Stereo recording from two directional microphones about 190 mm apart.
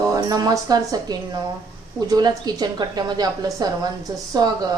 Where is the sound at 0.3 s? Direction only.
20° right (ahead or behind).